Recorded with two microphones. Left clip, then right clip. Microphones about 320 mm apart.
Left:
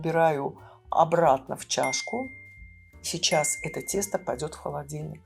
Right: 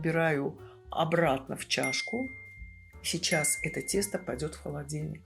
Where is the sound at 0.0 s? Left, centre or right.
Left.